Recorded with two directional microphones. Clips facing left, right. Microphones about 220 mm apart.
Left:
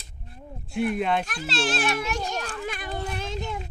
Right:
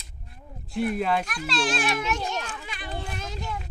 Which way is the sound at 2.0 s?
35° left (ahead or behind).